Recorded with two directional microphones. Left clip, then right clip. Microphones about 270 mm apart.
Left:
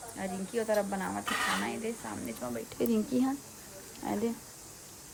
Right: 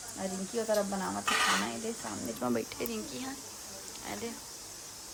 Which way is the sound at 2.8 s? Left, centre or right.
Centre.